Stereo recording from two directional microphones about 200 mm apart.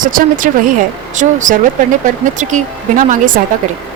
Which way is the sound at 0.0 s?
45° right (ahead or behind).